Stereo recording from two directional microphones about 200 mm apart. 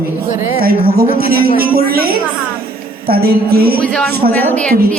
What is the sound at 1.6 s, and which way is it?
Music, 50° right (ahead or behind).